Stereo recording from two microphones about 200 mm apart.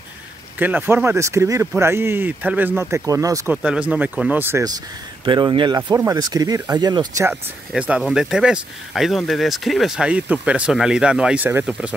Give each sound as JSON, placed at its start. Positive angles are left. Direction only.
{"t": 0.6, "sound": "speech", "side_deg": -10}
{"t": 3.6, "sound": "speech", "side_deg": -5}
{"t": 7.7, "sound": "speech", "side_deg": -5}